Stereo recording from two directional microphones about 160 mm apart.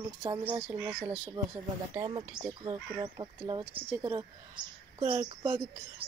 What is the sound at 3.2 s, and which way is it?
Speech, 35° right (ahead or behind).